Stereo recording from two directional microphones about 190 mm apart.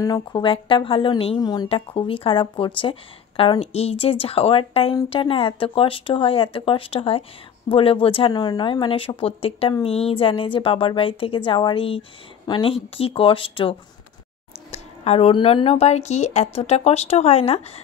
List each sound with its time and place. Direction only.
0.0 s a woman's voice: 20° left (ahead or behind)